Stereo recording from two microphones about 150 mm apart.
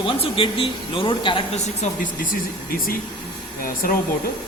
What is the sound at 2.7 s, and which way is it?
Speech, 75° left (ahead or behind).